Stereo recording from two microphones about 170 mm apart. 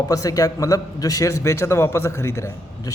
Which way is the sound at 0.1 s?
20° left (ahead or behind).